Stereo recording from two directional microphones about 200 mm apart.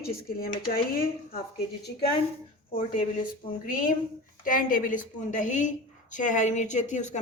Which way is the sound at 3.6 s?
40° left (ahead or behind).